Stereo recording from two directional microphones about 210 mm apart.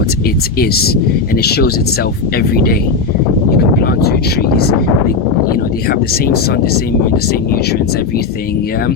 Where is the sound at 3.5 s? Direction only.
50° left (ahead or behind).